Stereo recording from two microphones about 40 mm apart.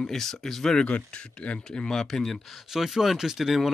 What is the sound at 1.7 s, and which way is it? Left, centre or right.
Speech, centre.